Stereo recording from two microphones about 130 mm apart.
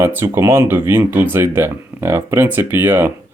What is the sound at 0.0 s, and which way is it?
Speech, 15° right (ahead or behind).